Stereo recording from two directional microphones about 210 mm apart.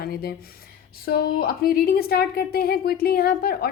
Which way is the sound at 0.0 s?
45° left (ahead or behind).